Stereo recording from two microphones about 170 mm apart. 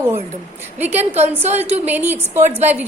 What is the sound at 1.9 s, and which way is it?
Speech, 10° right (ahead or behind).